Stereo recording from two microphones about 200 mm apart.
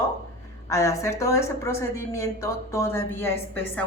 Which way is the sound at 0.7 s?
15° left (ahead or behind).